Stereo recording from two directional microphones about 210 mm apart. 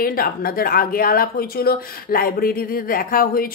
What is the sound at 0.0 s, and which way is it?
A woman's voice, 45° left (ahead or behind).